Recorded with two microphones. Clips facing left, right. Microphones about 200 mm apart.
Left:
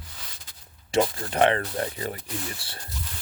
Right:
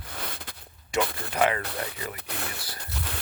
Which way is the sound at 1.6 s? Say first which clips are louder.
Left 4 dB; 65° right (ahead or behind).